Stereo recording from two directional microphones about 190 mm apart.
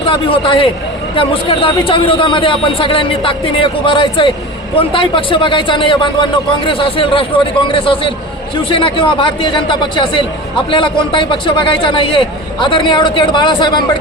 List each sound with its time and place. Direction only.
0.4 s a man's voice: 25° left (ahead or behind)